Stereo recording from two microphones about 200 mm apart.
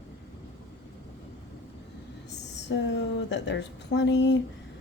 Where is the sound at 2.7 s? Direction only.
60° left (ahead or behind).